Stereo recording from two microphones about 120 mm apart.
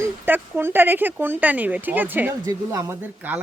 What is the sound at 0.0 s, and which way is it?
Speech, 15° right (ahead or behind).